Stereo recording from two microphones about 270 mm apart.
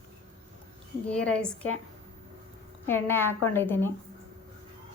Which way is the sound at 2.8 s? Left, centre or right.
Centre.